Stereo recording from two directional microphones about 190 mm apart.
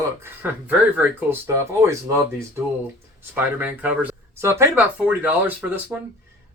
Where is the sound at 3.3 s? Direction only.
10° right (ahead or behind).